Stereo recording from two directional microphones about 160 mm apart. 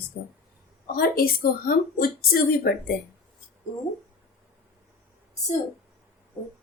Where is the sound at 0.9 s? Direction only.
70° left (ahead or behind).